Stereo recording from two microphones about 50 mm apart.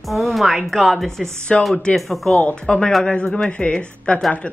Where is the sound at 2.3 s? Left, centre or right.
Centre.